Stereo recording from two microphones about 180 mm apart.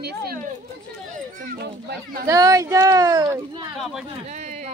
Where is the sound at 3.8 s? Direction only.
Centre (ahead or behind).